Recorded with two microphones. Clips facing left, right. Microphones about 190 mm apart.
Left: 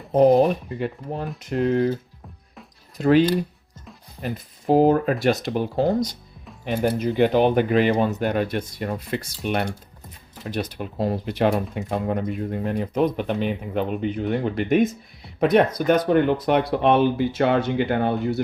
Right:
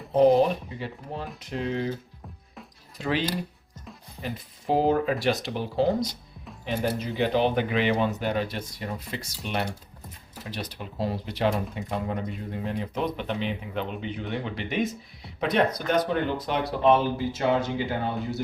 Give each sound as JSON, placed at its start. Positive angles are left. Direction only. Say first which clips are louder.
{"t": 0.2, "sound": "speech", "louder": "left 3 dB", "side_deg": 50}
{"t": 3.0, "sound": "speech", "louder": "left 10 dB", "side_deg": 50}